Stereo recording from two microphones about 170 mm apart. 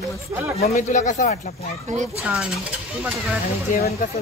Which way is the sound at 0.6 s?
45° left (ahead or behind).